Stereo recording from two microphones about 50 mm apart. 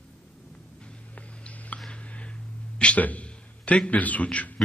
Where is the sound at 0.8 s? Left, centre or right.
Left.